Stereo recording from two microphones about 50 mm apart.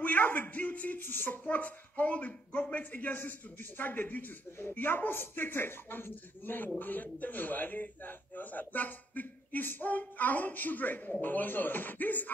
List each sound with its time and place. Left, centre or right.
0.0 s a man's voice: left
1.4 s a man's voice: left